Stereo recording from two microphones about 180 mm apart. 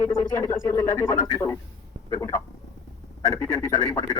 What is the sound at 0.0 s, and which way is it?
Speech, 15° left (ahead or behind).